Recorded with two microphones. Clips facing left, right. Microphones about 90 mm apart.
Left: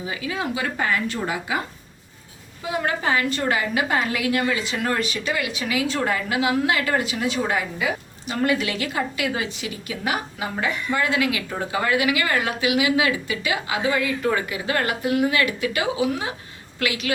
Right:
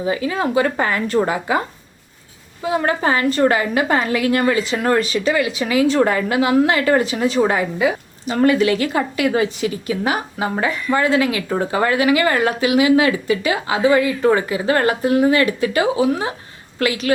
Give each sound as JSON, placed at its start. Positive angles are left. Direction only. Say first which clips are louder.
{"t": 0.0, "sound": "a woman's voice", "louder": "right 8 dB", "side_deg": -40}
{"t": 2.6, "sound": "a woman's voice", "louder": "right 5 dB", "side_deg": -40}